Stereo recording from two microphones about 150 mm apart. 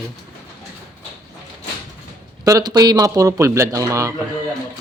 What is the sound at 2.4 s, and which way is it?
A man's voice, 25° right (ahead or behind).